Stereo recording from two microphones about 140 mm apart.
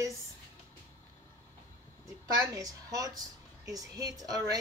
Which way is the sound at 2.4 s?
25° right (ahead or behind).